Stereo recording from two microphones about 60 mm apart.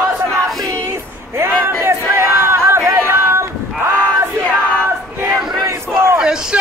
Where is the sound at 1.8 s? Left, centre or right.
Right.